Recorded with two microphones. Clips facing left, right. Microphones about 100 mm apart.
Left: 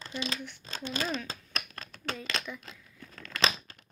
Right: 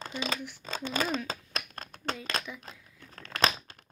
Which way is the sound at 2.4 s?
5° right (ahead or behind).